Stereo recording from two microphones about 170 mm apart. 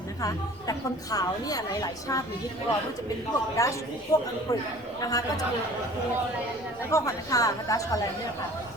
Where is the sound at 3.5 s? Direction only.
20° left (ahead or behind).